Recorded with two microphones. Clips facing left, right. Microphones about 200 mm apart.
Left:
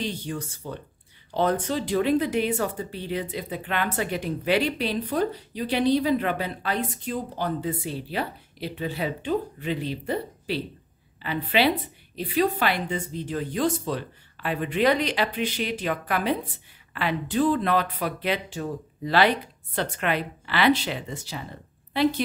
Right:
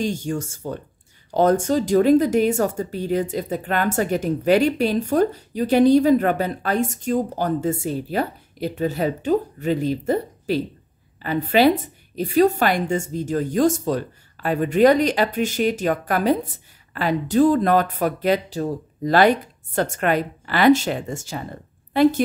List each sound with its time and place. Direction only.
0.0 s a woman's voice: 45° right (ahead or behind)